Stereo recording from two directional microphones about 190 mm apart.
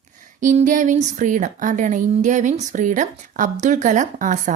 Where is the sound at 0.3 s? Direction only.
40° right (ahead or behind).